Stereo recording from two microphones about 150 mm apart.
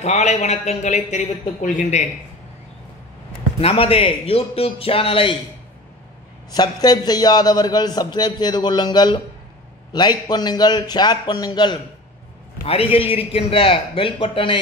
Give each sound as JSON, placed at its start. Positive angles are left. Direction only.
{"t": 0.0, "sound": "a man's voice", "side_deg": 50}
{"t": 3.5, "sound": "a man's voice", "side_deg": 40}
{"t": 6.5, "sound": "a man's voice", "side_deg": 25}
{"t": 12.6, "sound": "a man's voice", "side_deg": 40}